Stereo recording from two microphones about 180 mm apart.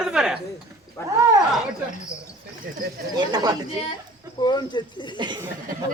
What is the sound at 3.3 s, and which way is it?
Speech, 20° right (ahead or behind).